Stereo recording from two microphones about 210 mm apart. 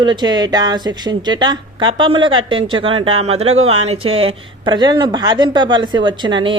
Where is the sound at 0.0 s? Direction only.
20° right (ahead or behind).